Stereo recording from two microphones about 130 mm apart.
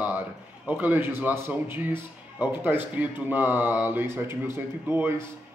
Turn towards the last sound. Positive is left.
turn(degrees=-15)  # may be behind; listen again after turning